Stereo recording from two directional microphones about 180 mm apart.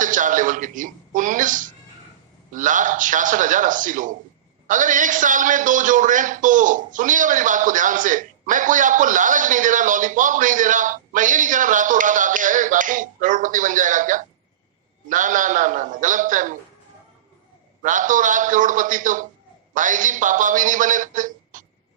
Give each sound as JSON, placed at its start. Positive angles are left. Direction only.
{"t": 0.0, "sound": "a man's voice", "side_deg": -45}
{"t": 17.8, "sound": "a man's voice", "side_deg": -45}